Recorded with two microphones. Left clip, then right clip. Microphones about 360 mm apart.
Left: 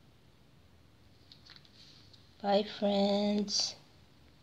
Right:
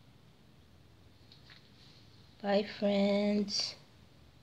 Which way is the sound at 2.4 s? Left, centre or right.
Centre.